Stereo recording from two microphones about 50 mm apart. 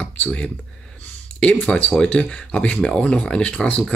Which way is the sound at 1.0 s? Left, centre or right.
Left.